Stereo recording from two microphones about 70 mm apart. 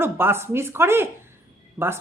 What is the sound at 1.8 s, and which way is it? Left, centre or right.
Speech, right.